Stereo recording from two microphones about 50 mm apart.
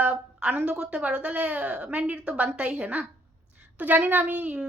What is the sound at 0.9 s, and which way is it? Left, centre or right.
Speech, centre.